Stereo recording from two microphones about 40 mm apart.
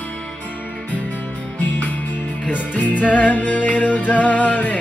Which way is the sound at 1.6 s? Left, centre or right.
Left.